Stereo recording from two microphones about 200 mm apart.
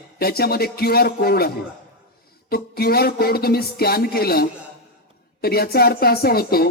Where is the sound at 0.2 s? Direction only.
50° left (ahead or behind).